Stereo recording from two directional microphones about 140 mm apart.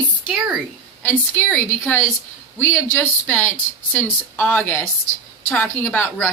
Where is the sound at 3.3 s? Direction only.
10° left (ahead or behind).